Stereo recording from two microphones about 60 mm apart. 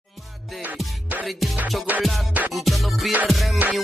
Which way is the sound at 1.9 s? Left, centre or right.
Right.